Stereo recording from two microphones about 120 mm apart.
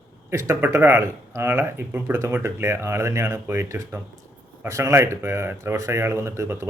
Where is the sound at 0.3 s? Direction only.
25° right (ahead or behind).